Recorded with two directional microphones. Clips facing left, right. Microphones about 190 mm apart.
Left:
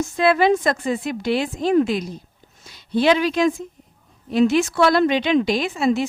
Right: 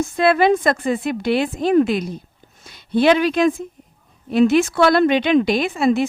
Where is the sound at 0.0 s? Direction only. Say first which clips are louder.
Right 2 dB; 55° right (ahead or behind).